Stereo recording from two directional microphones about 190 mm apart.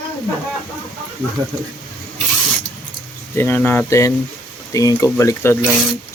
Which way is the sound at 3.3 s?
10° left (ahead or behind).